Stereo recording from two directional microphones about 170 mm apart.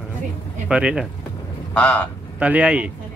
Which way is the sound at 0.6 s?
5° right (ahead or behind).